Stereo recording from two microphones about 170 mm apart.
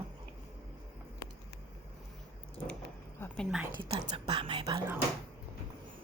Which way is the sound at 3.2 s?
Centre (ahead or behind).